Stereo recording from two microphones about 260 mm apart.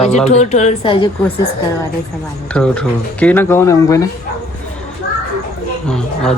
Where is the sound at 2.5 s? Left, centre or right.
Centre.